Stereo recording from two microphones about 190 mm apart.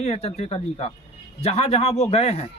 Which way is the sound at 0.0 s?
35° left (ahead or behind).